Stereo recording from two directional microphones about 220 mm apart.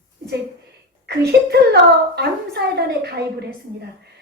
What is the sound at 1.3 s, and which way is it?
A child's voice, 50° right (ahead or behind).